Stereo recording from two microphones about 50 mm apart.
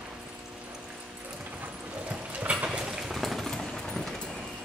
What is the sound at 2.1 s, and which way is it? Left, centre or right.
Clip-clop, right.